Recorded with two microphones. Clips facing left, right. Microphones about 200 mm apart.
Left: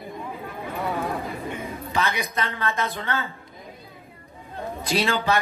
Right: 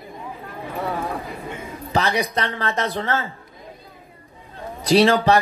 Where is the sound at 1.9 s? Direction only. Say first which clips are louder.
Right 6 dB; 35° right (ahead or behind).